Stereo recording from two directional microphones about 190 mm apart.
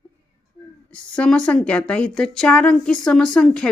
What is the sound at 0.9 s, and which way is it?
Speech, 5° left (ahead or behind).